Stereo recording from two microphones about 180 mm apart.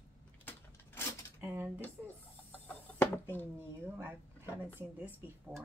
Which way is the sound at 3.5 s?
15° right (ahead or behind).